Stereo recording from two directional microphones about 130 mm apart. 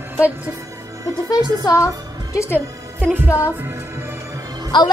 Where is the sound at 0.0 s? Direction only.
15° right (ahead or behind).